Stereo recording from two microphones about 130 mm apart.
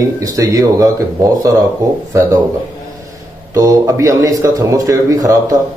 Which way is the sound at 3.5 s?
25° right (ahead or behind).